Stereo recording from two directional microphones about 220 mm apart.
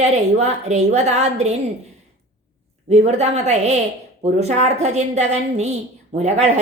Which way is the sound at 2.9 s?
30° right (ahead or behind).